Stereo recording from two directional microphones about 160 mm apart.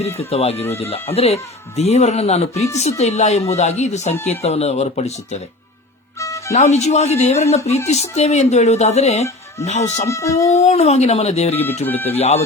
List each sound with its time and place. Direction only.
0.2 s speech: 40° left (ahead or behind)
6.1 s music: 20° left (ahead or behind)
6.5 s speech: 45° left (ahead or behind)
10.1 s a sound: 20° left (ahead or behind)
10.5 s speech: 45° left (ahead or behind)
11.9 s speech: 10° left (ahead or behind)
12.1 s speech: 40° left (ahead or behind)